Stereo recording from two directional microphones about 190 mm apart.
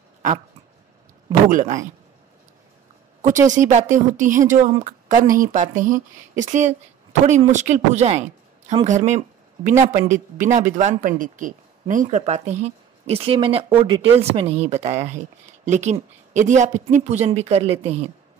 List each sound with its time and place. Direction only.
1.5 s speech: 45° right (ahead or behind)
3.2 s a woman's voice: 40° right (ahead or behind)